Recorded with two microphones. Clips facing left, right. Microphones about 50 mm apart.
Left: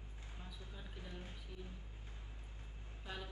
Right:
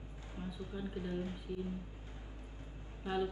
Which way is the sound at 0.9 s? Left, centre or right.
Right.